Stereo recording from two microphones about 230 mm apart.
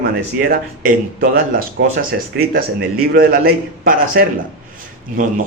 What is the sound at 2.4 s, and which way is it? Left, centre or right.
Speech, right.